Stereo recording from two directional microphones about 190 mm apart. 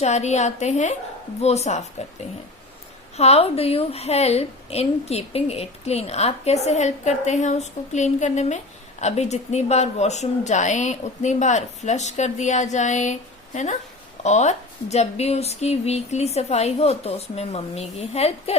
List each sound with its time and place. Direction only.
0.0 s a woman's voice: 35° left (ahead or behind)
3.2 s a woman's voice: 35° left (ahead or behind)